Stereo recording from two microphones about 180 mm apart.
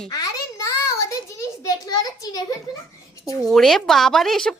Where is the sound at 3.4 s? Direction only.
Centre (ahead or behind).